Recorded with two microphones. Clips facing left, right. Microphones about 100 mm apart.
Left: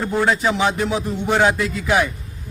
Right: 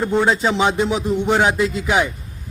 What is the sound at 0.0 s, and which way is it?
A man's voice, 20° right (ahead or behind).